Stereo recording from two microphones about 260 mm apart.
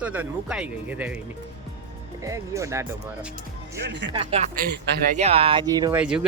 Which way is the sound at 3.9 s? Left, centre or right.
Right.